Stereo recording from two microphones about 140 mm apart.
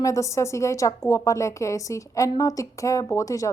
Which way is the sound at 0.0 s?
20° left (ahead or behind).